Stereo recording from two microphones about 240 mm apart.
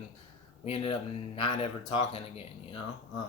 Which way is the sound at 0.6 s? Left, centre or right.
Left.